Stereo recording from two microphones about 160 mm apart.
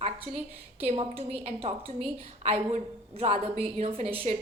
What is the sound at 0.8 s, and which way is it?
A woman's voice, 40° right (ahead or behind).